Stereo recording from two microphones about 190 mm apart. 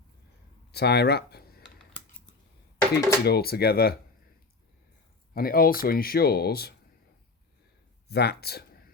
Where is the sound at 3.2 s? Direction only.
55° left (ahead or behind).